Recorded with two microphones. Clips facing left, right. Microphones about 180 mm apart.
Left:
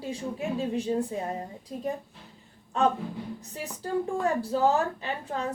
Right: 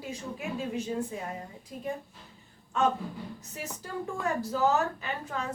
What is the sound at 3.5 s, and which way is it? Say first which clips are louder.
Speech: left 7 dB; 35° left (ahead or behind).